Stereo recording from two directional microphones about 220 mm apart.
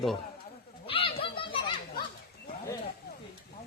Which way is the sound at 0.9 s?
25° left (ahead or behind).